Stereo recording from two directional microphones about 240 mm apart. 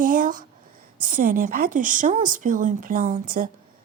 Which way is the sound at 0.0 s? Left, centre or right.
Right.